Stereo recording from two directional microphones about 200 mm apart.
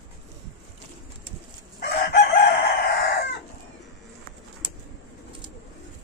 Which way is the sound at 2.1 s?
55° left (ahead or behind).